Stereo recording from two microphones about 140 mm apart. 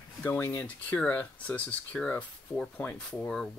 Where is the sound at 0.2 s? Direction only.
15° left (ahead or behind).